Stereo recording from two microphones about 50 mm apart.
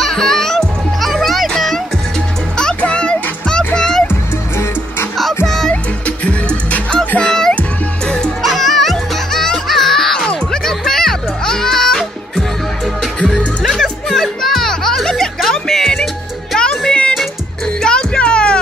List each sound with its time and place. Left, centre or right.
0.0 s music: centre
2.5 s music: centre
5.5 s music: centre
6.0 s music: left
8.4 s music: centre; by 18.6 s left